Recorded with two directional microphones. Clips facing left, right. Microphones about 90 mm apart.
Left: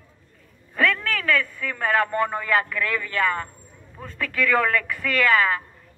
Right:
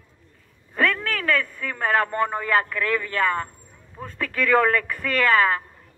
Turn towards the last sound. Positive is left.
turn(degrees=-40)  # may be behind; listen again after turning